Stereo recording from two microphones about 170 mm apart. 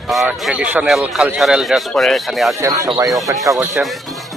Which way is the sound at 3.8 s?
5° right (ahead or behind).